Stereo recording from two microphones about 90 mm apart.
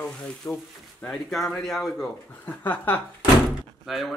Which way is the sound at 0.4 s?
30° left (ahead or behind).